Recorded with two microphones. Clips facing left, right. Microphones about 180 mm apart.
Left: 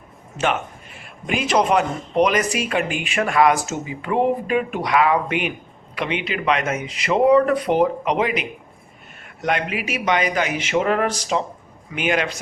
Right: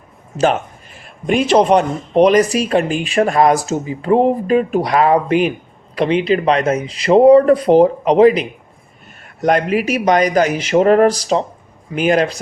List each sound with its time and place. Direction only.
0.9 s speech: 35° right (ahead or behind)